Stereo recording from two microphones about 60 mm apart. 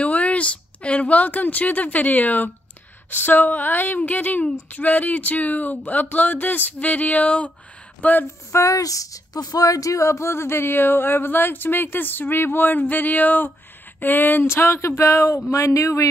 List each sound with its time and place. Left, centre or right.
0.0 s a sound: left
3.1 s speech: left
8.5 s speech: left